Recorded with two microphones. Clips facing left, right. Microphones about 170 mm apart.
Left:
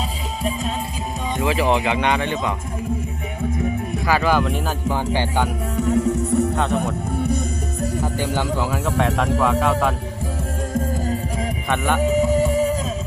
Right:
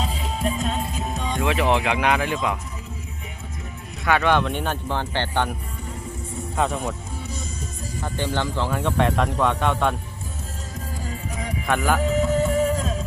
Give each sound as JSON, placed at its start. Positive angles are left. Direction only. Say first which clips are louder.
{"t": 1.4, "sound": "speech", "louder": "left 2 dB", "side_deg": 0}
{"t": 4.0, "sound": "speech", "louder": "even", "side_deg": 0}
{"t": 5.7, "sound": "music", "louder": "left 15 dB", "side_deg": 80}
{"t": 8.0, "sound": "speech", "louder": "right 1 dB", "side_deg": 5}
{"t": 11.7, "sound": "speech", "louder": "even", "side_deg": 0}
{"t": 11.9, "sound": "music", "louder": "left 3 dB", "side_deg": 15}
{"t": 12.5, "sound": "music", "louder": "left 2 dB", "side_deg": 5}